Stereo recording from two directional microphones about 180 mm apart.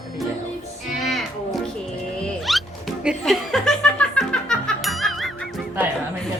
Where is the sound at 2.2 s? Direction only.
Centre (ahead or behind).